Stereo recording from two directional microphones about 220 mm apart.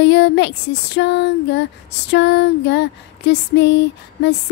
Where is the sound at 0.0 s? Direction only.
50° left (ahead or behind).